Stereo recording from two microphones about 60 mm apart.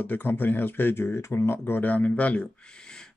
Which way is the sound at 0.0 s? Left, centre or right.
Left.